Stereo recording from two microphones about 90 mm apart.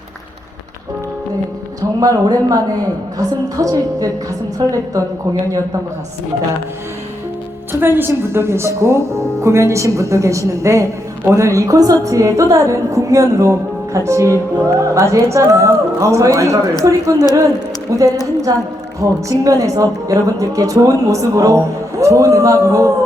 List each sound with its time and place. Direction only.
2.0 s a woman's voice: 45° right (ahead or behind)
7.7 s a woman's voice: 25° right (ahead or behind)
18.5 s a woman's voice: 45° right (ahead or behind)